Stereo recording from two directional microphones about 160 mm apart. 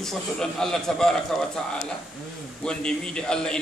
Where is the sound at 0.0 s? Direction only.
5° left (ahead or behind).